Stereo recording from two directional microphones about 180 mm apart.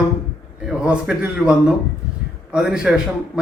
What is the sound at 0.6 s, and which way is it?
A man's voice, 5° right (ahead or behind).